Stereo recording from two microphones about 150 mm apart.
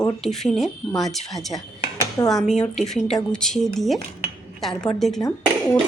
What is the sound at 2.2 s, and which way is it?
Speech, 20° left (ahead or behind).